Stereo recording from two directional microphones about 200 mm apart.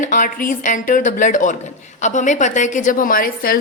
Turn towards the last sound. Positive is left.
turn(degrees=45)  # may be behind; listen again after turning